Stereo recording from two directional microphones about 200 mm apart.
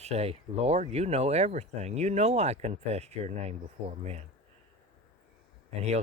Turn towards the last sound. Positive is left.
turn(degrees=-35)  # may be behind; listen again after turning